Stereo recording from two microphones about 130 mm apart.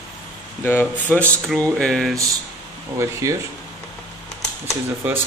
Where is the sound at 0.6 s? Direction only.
15° left (ahead or behind).